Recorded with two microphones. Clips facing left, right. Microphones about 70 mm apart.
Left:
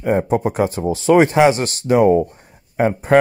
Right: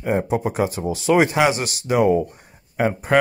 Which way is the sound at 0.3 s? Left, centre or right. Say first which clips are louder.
Left 3 dB; left.